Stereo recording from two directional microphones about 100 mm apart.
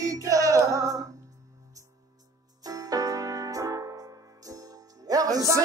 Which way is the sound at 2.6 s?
40° right (ahead or behind).